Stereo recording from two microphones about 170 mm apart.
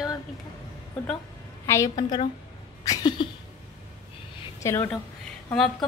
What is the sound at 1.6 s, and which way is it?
A woman's voice, 20° left (ahead or behind).